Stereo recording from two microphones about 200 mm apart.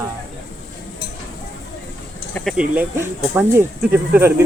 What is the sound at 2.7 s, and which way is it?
Speech, 10° right (ahead or behind).